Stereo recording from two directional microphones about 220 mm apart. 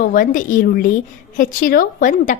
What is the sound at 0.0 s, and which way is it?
A woman's voice, 40° left (ahead or behind).